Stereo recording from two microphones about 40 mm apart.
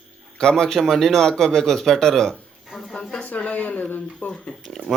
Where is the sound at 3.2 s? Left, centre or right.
Left.